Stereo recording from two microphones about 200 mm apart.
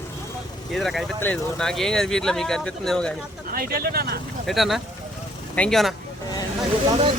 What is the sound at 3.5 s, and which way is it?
Speech, 50° right (ahead or behind).